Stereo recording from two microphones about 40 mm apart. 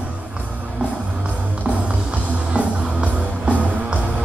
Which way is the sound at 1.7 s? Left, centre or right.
Right.